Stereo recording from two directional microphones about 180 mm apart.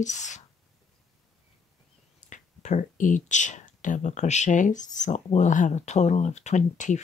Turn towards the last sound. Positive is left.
turn(degrees=40)  # may be behind; listen again after turning